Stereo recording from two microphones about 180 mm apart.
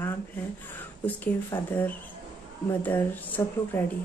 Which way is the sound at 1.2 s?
10° left (ahead or behind).